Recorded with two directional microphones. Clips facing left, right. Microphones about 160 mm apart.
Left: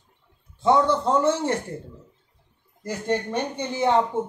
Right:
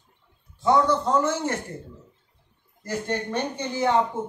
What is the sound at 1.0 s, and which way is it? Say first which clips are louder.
Speech: left 2 dB; 30° left (ahead or behind).